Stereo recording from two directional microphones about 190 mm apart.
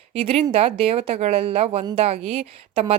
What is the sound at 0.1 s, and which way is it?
Speech, 30° right (ahead or behind).